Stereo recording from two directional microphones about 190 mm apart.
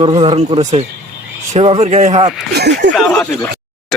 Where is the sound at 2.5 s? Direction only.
65° right (ahead or behind).